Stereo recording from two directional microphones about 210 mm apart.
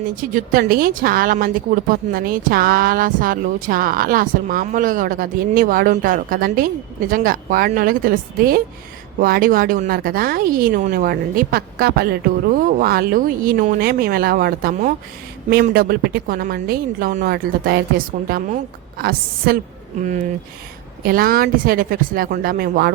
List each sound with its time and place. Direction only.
0.0 s a woman's voice: 40° right (ahead or behind)